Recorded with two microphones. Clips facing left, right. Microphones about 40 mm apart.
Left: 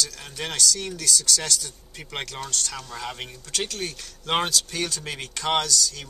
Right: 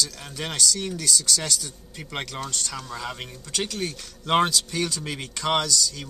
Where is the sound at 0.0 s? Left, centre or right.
Centre.